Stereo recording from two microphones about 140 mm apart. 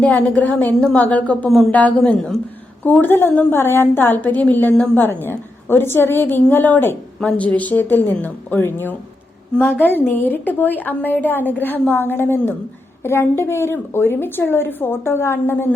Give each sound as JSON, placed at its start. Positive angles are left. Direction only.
{"t": 0.0, "sound": "a woman's voice", "side_deg": 10}